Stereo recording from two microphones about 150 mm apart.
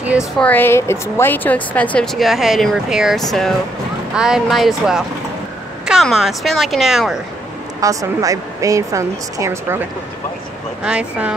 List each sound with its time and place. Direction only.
0.0 s speech: 10° right (ahead or behind)
0.4 s a woman's voice: 10° left (ahead or behind)
2.1 s speech: centre (ahead or behind)
7.8 s a woman's voice: 20° right (ahead or behind)
10.8 s speech: 5° right (ahead or behind)